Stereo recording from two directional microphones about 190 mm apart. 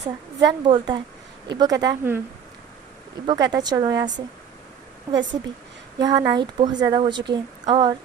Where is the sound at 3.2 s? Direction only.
25° right (ahead or behind).